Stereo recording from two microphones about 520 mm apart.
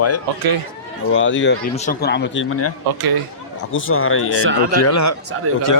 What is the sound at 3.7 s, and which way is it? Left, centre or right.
Speech, left.